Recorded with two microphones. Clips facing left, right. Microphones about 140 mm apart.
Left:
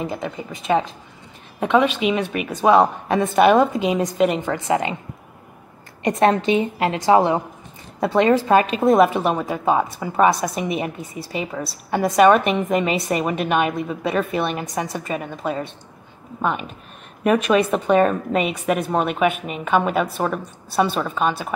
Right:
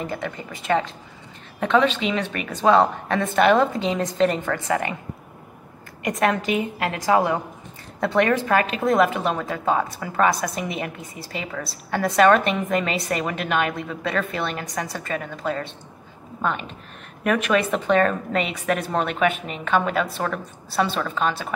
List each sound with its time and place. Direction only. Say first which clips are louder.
0.0 s a woman's voice: left 2 dB; 15° left (ahead or behind)
6.0 s a woman's voice: left 5 dB; 30° left (ahead or behind)